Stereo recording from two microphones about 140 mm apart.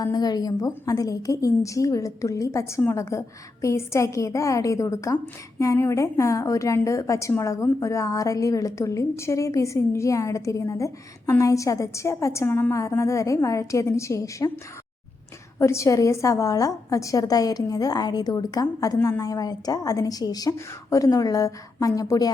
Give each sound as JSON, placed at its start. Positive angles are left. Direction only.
{"t": 0.0, "sound": "a woman's voice", "side_deg": 30}
{"t": 15.5, "sound": "a woman's voice", "side_deg": 20}